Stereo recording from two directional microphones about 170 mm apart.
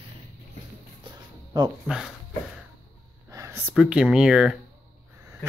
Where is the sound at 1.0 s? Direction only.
25° right (ahead or behind).